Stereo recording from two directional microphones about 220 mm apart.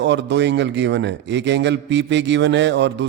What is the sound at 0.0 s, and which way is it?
A man's voice, 55° right (ahead or behind).